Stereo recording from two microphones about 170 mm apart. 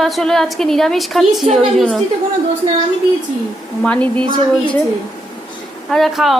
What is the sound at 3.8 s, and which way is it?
Speech, 5° left (ahead or behind).